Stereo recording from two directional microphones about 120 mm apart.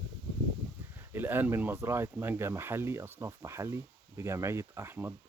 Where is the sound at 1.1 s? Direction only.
15° right (ahead or behind).